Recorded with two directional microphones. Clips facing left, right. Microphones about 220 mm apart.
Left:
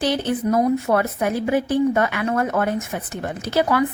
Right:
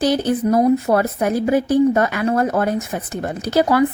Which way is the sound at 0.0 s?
40° right (ahead or behind).